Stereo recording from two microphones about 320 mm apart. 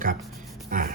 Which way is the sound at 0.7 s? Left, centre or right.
Right.